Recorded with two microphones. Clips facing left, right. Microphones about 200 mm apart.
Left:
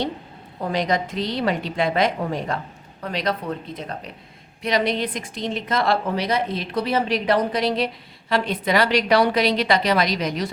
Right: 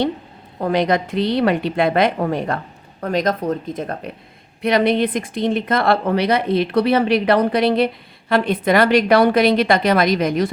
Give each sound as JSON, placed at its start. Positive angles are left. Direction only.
{"t": 0.6, "sound": "a woman's voice", "side_deg": -60}
{"t": 3.0, "sound": "a woman's voice", "side_deg": -45}